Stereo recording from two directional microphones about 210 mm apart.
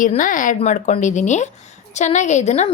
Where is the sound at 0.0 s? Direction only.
40° left (ahead or behind).